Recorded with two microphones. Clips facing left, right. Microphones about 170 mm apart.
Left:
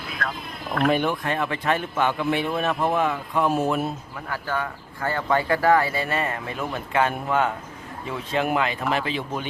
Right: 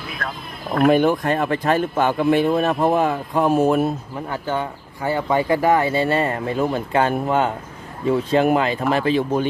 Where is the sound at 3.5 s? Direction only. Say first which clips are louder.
Right 6 dB; 50° right (ahead or behind).